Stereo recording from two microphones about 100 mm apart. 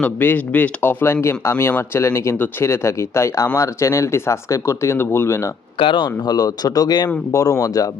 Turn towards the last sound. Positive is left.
turn(degrees=35)  # may be behind; listen again after turning